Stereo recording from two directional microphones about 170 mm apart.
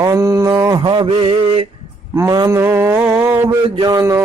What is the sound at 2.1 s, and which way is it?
Mantra, 20° right (ahead or behind).